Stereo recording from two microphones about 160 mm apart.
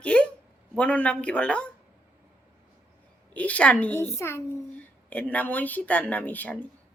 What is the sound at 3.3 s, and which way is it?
A child's voice, 10° left (ahead or behind).